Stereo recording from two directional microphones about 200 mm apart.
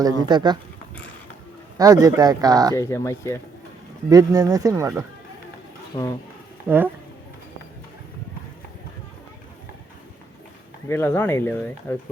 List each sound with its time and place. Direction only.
0.0 s speech: 20° right (ahead or behind)
1.8 s speech: 15° right (ahead or behind)
2.7 s speech: 15° left (ahead or behind)
4.1 s speech: 15° right (ahead or behind)
6.7 s speech: 10° right (ahead or behind)
10.8 s speech: 10° left (ahead or behind)